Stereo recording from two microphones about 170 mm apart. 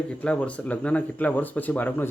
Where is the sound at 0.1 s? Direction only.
5° left (ahead or behind).